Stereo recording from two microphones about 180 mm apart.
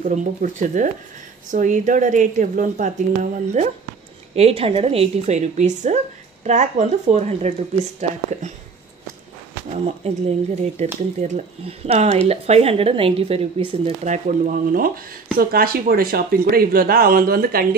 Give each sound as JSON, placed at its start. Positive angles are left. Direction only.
{"t": 0.0, "sound": "speech", "side_deg": -45}
{"t": 9.8, "sound": "speech", "side_deg": -35}
{"t": 14.0, "sound": "speech", "side_deg": -45}